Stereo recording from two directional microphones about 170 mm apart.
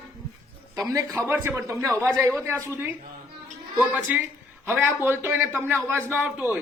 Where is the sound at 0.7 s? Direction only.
20° right (ahead or behind).